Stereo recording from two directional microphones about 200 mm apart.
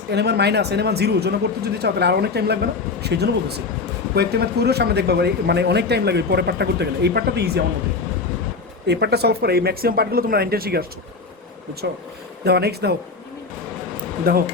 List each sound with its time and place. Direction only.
0.1 s speech: 55° right (ahead or behind)
8.9 s speech: 55° right (ahead or behind)
14.3 s speech: 50° right (ahead or behind)